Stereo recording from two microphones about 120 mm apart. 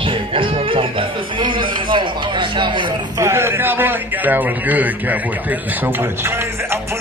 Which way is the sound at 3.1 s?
20° right (ahead or behind).